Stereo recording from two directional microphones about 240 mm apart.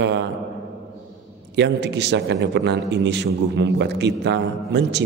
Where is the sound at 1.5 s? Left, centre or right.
Right.